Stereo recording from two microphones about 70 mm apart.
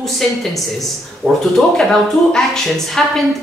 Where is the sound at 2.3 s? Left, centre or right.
Centre.